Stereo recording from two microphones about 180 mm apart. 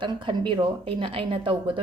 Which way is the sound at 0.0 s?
25° right (ahead or behind).